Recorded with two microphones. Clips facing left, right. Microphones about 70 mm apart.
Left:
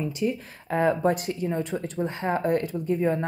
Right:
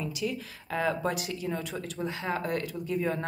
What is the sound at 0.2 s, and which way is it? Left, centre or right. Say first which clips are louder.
A woman's voice: left 6 dB; left.